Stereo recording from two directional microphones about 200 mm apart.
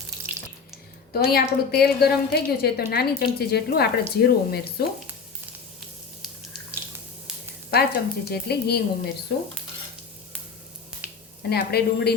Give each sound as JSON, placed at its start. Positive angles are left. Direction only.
{"t": 1.1, "sound": "a woman's voice", "side_deg": 50}
{"t": 7.7, "sound": "a woman's voice", "side_deg": 50}
{"t": 10.9, "sound": "finger snapping", "side_deg": -5}
{"t": 11.4, "sound": "a woman's voice", "side_deg": 50}